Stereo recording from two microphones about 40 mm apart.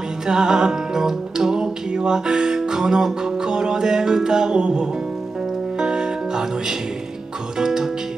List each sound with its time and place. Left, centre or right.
0.3 s music: centre
4.6 s music: right
7.5 s speech: centre